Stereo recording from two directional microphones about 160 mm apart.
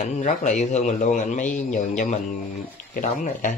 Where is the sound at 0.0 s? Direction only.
50° left (ahead or behind).